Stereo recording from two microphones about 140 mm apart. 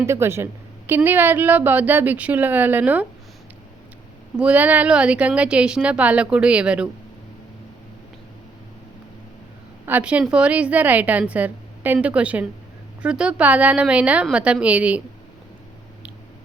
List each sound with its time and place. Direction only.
0.0 s a woman's voice: 20° right (ahead or behind)
4.4 s a woman's voice: 10° right (ahead or behind)
9.8 s a woman's voice: 10° right (ahead or behind)